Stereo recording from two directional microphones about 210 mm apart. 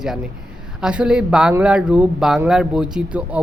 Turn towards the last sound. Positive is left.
turn(degrees=-5)  # may be behind; listen again after turning